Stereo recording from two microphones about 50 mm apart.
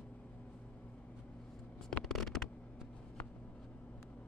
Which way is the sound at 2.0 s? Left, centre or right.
Centre.